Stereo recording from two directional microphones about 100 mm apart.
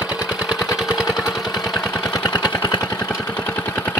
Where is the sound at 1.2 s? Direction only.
35° left (ahead or behind).